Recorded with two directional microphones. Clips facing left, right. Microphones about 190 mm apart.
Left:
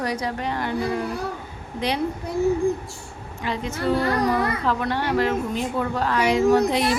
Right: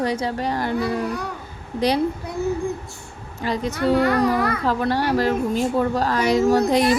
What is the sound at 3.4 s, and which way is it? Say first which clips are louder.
Speech: right 4 dB; 35° right (ahead or behind).